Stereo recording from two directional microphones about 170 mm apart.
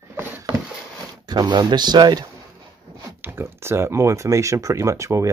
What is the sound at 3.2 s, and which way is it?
Speech, 10° right (ahead or behind).